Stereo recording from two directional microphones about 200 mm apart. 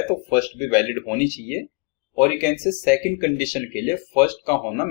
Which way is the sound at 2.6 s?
40° left (ahead or behind).